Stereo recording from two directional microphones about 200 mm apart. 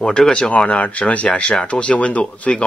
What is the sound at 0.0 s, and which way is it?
Speech, 5° left (ahead or behind).